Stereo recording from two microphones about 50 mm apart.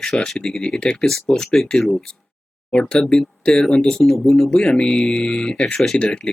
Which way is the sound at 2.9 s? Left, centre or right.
Centre.